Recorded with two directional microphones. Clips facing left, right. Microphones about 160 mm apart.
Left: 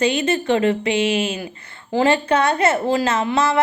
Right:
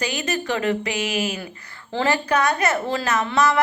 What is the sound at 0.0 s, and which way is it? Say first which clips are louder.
A woman's voice: left 7 dB; 25° left (ahead or behind).